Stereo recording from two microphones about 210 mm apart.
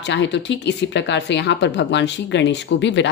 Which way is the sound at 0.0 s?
55° left (ahead or behind).